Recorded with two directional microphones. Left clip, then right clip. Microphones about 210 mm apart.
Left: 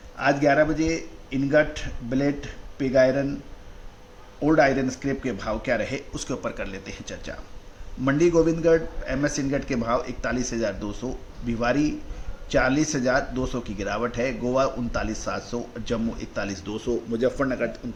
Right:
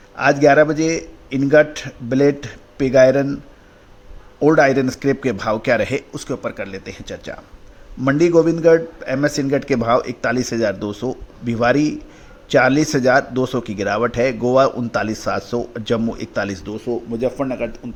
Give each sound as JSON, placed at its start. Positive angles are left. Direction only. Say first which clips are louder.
{"t": 0.2, "sound": "a man's voice", "louder": "right 8 dB", "side_deg": -45}
{"t": 4.4, "sound": "speech", "louder": "right 7 dB", "side_deg": -45}
{"t": 16.7, "sound": "speech", "louder": "right 1 dB", "side_deg": -20}